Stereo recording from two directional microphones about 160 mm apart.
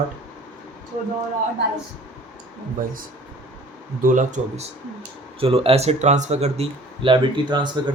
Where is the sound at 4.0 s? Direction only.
50° right (ahead or behind).